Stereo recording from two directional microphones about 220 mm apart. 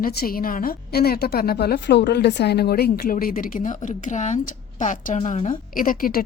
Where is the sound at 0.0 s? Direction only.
45° left (ahead or behind).